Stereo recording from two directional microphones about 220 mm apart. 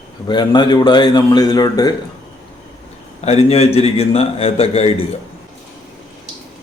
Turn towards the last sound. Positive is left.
turn(degrees=25)  # may be behind; listen again after turning